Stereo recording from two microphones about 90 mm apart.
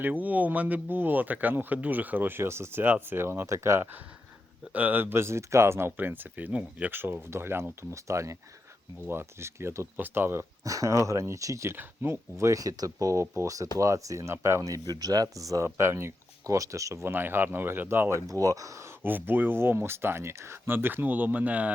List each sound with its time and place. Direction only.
0.0 s speech: 20° right (ahead or behind)
10.6 s speech: 40° right (ahead or behind); by 21.7 s 15° right (ahead or behind)